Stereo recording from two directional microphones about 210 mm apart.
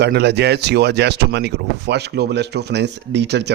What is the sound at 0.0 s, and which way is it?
Speech, 50° right (ahead or behind).